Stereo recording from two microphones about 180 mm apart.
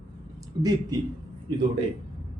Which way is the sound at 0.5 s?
20° right (ahead or behind).